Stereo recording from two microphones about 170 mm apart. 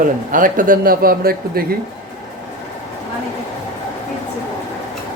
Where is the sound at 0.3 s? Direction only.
50° right (ahead or behind).